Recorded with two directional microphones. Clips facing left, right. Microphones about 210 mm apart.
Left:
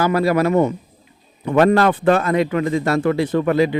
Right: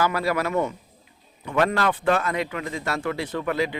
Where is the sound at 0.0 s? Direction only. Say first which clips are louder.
Left 7 dB; 35° left (ahead or behind).